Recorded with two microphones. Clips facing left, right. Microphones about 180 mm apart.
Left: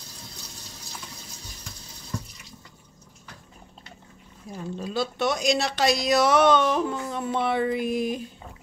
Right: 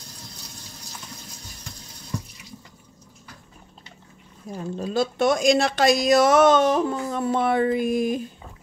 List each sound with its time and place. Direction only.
4.5 s speech: 45° right (ahead or behind)